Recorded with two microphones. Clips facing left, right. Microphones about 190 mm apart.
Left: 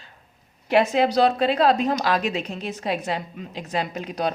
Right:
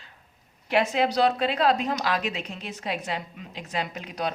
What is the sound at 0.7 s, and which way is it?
Speech, 35° left (ahead or behind).